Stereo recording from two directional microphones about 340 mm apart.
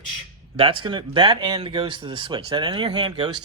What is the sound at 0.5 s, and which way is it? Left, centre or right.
Speech, centre.